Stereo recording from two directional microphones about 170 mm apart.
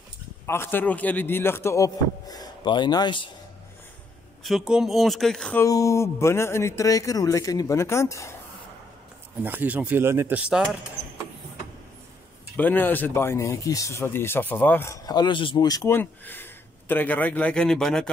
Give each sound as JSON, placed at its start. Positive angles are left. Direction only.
{"t": 0.5, "sound": "speech", "side_deg": 15}
{"t": 4.4, "sound": "speech", "side_deg": 0}
{"t": 5.6, "sound": "speech", "side_deg": 20}
{"t": 9.4, "sound": "speech", "side_deg": -10}
{"t": 12.5, "sound": "speech", "side_deg": 10}